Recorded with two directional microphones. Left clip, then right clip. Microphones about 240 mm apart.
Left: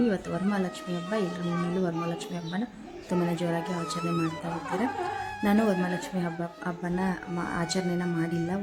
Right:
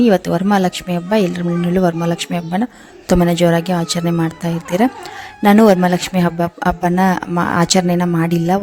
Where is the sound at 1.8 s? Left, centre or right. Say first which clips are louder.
Right 14 dB; right.